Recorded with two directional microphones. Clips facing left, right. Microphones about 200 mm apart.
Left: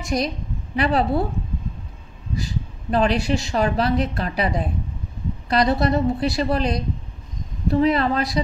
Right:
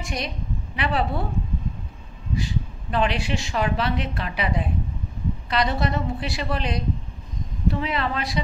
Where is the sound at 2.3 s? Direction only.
40° left (ahead or behind).